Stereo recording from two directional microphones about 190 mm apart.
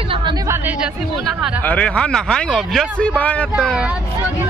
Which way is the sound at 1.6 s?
5° left (ahead or behind).